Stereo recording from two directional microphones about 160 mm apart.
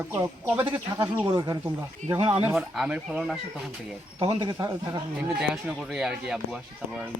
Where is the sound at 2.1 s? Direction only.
40° right (ahead or behind).